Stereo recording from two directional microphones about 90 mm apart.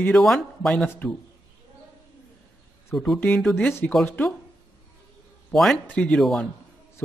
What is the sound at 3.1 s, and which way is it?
Speech, 10° left (ahead or behind).